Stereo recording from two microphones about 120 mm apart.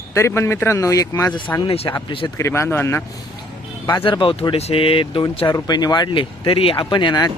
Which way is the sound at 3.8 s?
40° left (ahead or behind).